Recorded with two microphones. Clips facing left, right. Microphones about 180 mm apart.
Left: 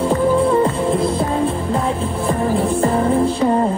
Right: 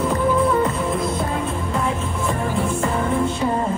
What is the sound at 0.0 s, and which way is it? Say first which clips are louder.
Music: left 4 dB; 30° left (ahead or behind).